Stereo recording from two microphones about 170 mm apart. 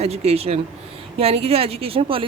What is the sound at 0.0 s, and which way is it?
Speech, 35° right (ahead or behind).